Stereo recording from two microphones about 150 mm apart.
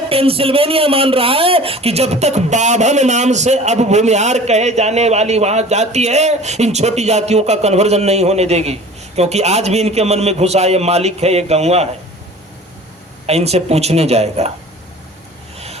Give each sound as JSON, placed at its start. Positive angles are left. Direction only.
{"t": 0.1, "sound": "a man's voice", "side_deg": -40}
{"t": 13.2, "sound": "a man's voice", "side_deg": -45}
{"t": 15.5, "sound": "vehicle", "side_deg": -45}